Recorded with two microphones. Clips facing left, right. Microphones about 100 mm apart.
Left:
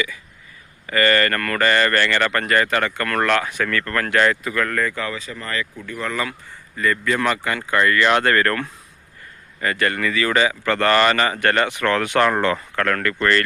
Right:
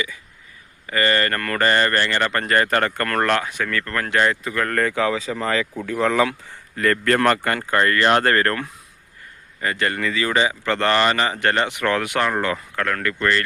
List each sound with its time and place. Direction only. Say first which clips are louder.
0.9 s speech: left 2 dB; 20° right (ahead or behind)
3.4 s speech: left 2 dB; 15° right (ahead or behind)
4.7 s speech: right 4 dB; 65° right (ahead or behind); by 8.5 s 30° right (ahead or behind)
9.6 s speech: left 2 dB; 25° right (ahead or behind)